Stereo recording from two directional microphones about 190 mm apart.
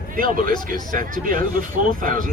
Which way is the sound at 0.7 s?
45° right (ahead or behind).